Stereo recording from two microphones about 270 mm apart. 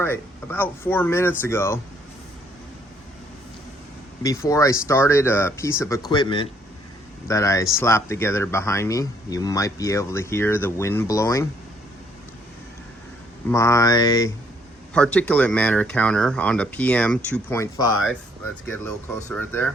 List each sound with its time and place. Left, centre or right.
0.0 s speech: centre
4.2 s speech: centre
13.5 s speech: centre